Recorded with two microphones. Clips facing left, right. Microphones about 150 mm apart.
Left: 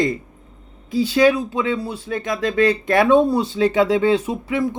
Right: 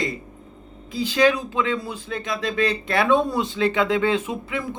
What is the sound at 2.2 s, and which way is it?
Speech, 45° left (ahead or behind).